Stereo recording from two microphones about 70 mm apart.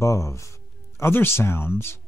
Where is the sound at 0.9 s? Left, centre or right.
Left.